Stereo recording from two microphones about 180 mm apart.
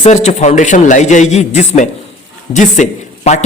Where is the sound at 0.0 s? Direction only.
40° left (ahead or behind).